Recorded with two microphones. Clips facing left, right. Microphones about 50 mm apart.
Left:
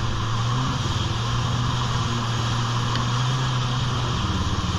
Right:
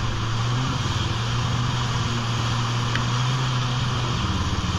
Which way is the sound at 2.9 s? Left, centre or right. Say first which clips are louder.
Even; right.